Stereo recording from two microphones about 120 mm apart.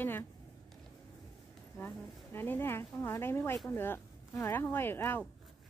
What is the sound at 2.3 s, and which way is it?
Speech, 20° left (ahead or behind).